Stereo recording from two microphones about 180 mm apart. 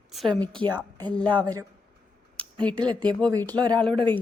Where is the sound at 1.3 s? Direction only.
25° right (ahead or behind).